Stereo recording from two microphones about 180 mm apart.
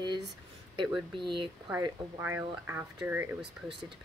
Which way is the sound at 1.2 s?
25° right (ahead or behind).